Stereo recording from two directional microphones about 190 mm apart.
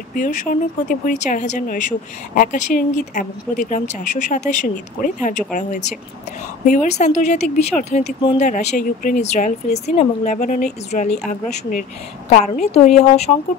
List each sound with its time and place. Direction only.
0.1 s speech: 45° left (ahead or behind)